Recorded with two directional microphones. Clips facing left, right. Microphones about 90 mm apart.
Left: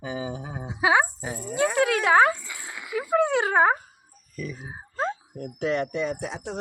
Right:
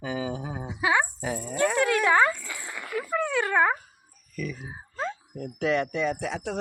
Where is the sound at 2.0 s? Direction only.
70° left (ahead or behind).